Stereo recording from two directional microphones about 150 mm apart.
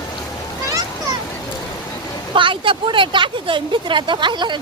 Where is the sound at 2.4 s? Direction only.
35° right (ahead or behind).